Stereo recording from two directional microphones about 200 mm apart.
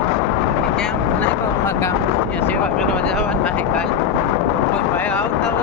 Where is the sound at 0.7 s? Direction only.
5° left (ahead or behind).